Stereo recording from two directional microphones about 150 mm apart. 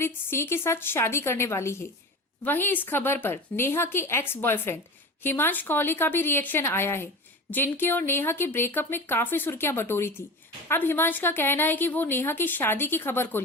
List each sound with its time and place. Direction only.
0.0 s a woman's voice: 15° left (ahead or behind)